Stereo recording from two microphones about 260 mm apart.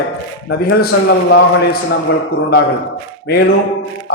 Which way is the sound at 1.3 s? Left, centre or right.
Left.